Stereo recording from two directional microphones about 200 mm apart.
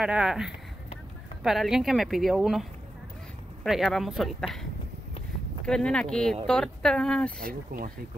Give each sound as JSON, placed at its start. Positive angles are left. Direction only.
{"t": 0.0, "sound": "speech", "side_deg": -5}
{"t": 3.6, "sound": "speech", "side_deg": 0}
{"t": 5.7, "sound": "speech", "side_deg": 5}
{"t": 7.4, "sound": "speech", "side_deg": -45}